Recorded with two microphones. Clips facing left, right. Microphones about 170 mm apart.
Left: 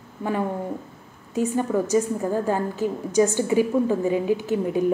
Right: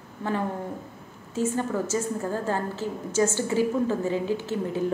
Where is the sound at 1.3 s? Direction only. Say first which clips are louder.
Left 4 dB; 15° left (ahead or behind).